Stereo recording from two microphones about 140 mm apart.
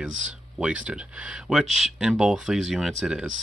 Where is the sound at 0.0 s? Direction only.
5° right (ahead or behind).